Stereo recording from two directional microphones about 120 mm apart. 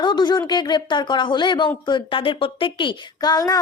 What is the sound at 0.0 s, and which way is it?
Speech, 40° left (ahead or behind).